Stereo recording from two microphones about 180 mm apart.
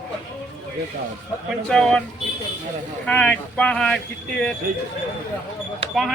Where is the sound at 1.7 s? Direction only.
5° left (ahead or behind).